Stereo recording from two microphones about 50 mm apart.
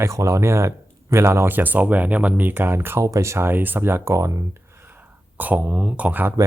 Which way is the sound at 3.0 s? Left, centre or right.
Right.